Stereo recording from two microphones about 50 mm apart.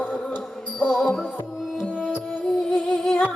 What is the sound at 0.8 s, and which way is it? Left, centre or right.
Music, centre.